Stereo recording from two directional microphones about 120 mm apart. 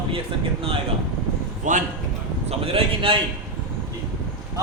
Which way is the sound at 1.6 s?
90° right.